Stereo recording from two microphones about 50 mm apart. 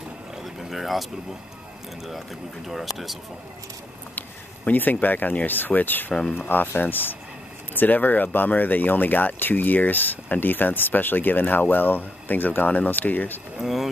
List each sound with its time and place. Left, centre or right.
0.4 s boat: centre
2.7 s speech: centre
4.6 s speech: left
13.6 s speech: centre